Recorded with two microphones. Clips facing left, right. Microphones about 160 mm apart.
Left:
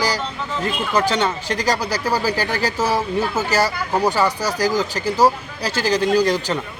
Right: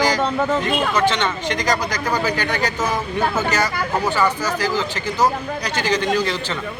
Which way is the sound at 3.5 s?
35° left (ahead or behind).